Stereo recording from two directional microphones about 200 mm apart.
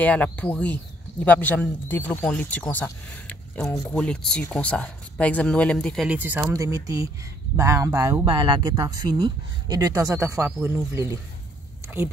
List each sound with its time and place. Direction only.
0.0 s speech: 5° left (ahead or behind); by 11.1 s 15° right (ahead or behind)